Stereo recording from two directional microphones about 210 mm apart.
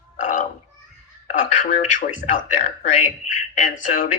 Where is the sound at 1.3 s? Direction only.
40° left (ahead or behind).